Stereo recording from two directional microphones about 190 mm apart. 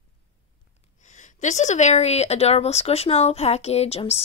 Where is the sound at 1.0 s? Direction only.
40° left (ahead or behind).